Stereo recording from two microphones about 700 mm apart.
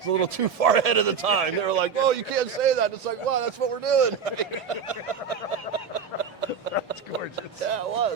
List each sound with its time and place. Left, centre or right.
0.1 s speech: right
7.7 s speech: right